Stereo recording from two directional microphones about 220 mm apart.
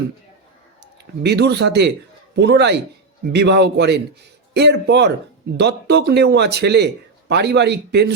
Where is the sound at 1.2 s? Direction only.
50° right (ahead or behind).